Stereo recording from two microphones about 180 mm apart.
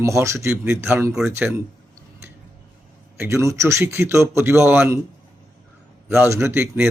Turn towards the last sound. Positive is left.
turn(degrees=-10)  # may be behind; listen again after turning